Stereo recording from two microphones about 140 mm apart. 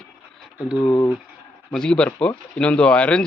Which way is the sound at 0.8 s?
20° left (ahead or behind).